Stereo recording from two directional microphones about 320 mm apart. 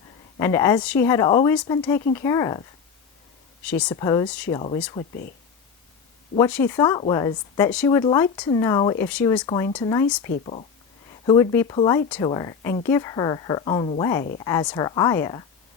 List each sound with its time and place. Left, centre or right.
0.3 s speech: centre
3.7 s speech: centre
6.5 s speech: centre
10.3 s speech: centre